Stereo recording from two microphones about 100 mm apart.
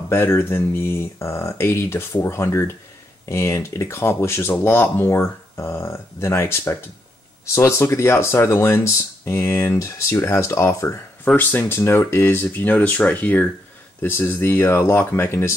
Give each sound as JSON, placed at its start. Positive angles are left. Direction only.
{"t": 0.1, "sound": "speech", "side_deg": 25}